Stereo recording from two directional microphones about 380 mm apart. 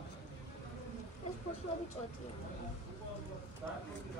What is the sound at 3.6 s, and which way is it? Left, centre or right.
Speech, centre.